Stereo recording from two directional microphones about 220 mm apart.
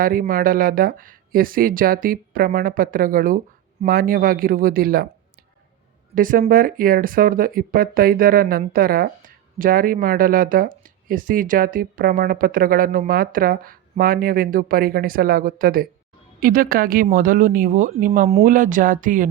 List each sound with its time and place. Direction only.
0.0 s speech: 40° right (ahead or behind)
6.1 s speech: 40° right (ahead or behind)